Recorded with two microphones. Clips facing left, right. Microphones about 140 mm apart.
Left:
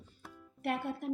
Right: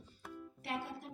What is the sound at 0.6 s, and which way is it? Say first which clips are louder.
Speech: left 7 dB; 55° left (ahead or behind).